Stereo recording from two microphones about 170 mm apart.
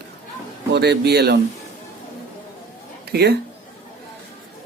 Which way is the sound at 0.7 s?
75° right (ahead or behind).